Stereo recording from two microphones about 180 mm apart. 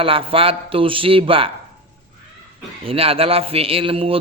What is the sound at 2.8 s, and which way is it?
Speech, 30° right (ahead or behind).